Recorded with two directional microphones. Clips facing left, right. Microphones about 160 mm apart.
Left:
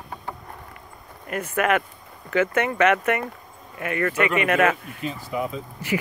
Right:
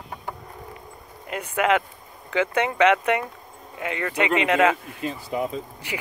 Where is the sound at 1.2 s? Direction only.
15° right (ahead or behind).